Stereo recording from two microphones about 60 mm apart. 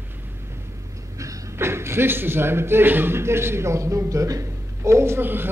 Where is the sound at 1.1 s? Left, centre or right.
Right.